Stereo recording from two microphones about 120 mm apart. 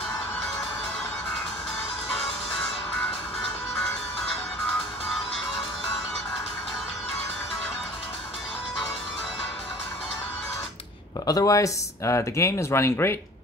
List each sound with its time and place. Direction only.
11.2 s speech: 30° left (ahead or behind)